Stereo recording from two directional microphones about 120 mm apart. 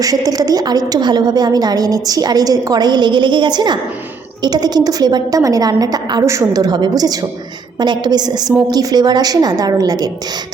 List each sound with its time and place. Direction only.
0.0 s a woman's voice: 30° right (ahead or behind)